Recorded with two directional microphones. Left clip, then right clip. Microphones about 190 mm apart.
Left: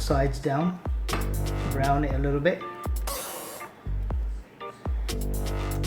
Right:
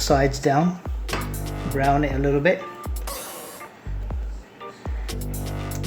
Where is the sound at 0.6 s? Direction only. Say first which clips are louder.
Right 4 dB; centre (ahead or behind).